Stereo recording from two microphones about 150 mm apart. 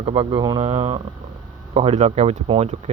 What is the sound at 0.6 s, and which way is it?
Speech, 40° right (ahead or behind).